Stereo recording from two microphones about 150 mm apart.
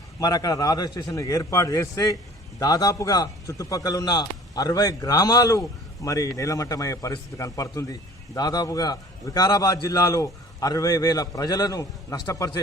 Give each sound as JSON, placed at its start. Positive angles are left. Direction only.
{"t": 0.2, "sound": "a man's voice", "side_deg": 25}